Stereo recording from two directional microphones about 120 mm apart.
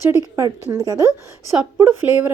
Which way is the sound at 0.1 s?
25° right (ahead or behind).